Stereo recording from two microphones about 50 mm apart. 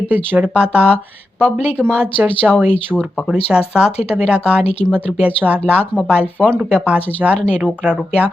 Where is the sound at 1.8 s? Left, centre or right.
Centre.